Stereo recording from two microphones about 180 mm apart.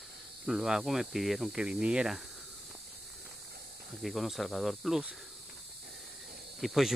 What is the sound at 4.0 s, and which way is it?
Speech, centre (ahead or behind).